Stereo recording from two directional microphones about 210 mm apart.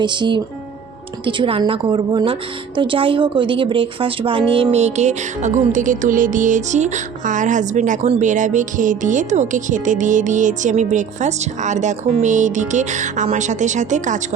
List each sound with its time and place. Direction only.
0.0 s a woman's voice: 20° right (ahead or behind)
5.7 s music: 35° right (ahead or behind)